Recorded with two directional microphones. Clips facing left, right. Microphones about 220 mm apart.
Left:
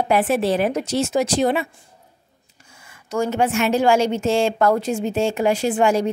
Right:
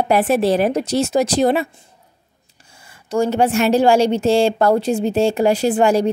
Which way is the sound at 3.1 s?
35° right (ahead or behind).